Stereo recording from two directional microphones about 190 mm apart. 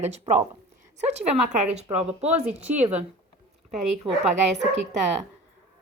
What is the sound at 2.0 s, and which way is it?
Speech, 5° right (ahead or behind).